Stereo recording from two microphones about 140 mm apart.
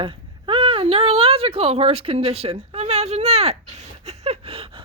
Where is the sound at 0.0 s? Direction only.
40° right (ahead or behind).